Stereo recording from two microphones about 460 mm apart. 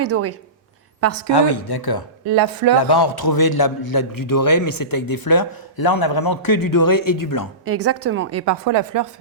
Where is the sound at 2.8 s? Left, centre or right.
Left.